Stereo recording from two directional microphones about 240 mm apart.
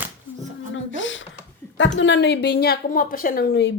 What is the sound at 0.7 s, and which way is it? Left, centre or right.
A woman's voice, left.